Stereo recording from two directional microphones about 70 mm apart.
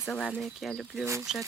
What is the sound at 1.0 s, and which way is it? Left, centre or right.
Speech, right.